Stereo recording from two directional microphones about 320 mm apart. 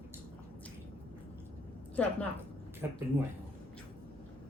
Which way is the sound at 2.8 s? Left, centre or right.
Centre.